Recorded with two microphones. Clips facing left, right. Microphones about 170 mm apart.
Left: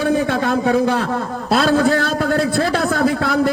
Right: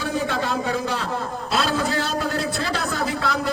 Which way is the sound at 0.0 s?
55° left (ahead or behind).